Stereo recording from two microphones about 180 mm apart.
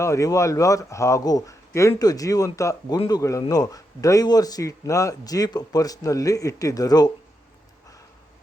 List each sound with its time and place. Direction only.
0.0 s a man's voice: 20° left (ahead or behind)